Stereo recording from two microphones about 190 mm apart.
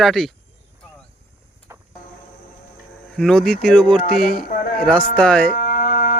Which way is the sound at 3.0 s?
5° left (ahead or behind).